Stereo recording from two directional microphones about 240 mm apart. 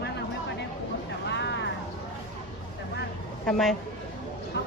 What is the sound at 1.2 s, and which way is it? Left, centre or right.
Vehicle, left.